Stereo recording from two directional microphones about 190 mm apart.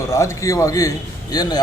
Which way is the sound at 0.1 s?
15° left (ahead or behind).